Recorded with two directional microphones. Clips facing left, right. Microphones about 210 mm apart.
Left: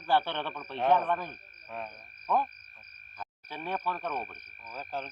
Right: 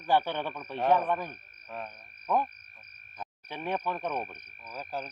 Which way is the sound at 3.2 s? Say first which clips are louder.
Right 2 dB; 20° right (ahead or behind).